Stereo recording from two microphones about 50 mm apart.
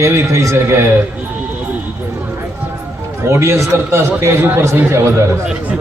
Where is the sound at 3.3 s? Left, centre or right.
Right.